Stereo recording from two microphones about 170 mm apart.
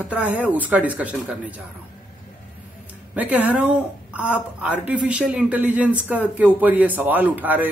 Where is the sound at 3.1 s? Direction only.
10° right (ahead or behind).